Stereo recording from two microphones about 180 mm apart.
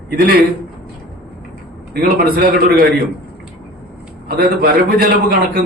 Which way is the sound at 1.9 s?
60° right (ahead or behind).